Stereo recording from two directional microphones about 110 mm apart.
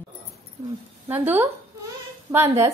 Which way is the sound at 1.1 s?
20° right (ahead or behind).